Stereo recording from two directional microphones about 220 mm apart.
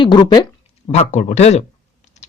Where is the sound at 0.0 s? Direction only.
20° left (ahead or behind).